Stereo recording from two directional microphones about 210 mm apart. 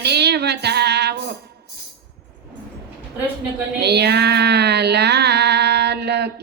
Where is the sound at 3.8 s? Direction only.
50° right (ahead or behind).